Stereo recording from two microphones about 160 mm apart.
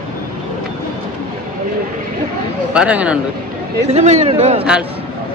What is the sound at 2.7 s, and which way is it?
Speech, 10° right (ahead or behind).